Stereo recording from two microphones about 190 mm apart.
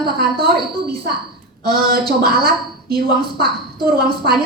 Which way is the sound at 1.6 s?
55° right (ahead or behind).